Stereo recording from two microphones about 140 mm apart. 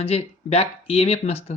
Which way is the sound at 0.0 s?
45° left (ahead or behind).